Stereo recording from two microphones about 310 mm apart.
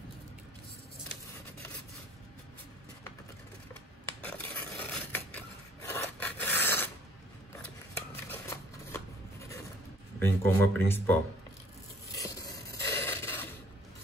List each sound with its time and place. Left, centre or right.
4.2 s filing: centre
8.3 s shuffling cards: centre
10.1 s speech: centre
12.2 s scrape: centre